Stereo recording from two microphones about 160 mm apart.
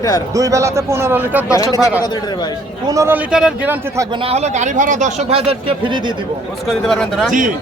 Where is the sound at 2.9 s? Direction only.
20° right (ahead or behind).